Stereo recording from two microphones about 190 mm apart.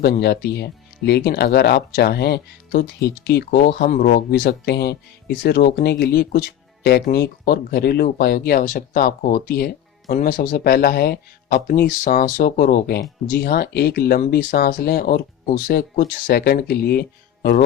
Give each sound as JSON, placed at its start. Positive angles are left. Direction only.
{"t": 0.0, "sound": "speech", "side_deg": 55}
{"t": 4.3, "sound": "speech", "side_deg": 60}